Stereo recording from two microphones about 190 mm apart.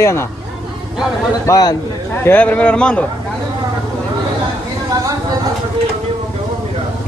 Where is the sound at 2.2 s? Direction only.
10° left (ahead or behind).